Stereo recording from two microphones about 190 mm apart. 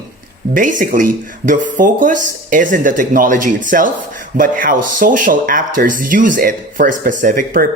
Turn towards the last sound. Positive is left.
turn(degrees=-45)  # may be behind; listen again after turning